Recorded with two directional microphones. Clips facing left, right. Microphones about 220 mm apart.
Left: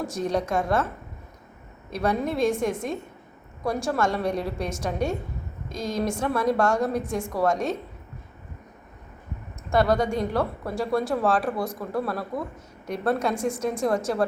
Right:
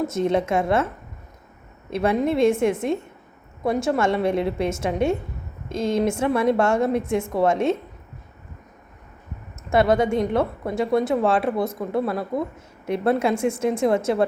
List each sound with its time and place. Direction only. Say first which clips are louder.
0.0 s speech: right 5 dB; 25° right (ahead or behind)
1.9 s speech: right 5 dB; 25° right (ahead or behind)
3.8 s speech: right 4 dB; 25° right (ahead or behind)
9.7 s speech: right 3 dB; 25° right (ahead or behind)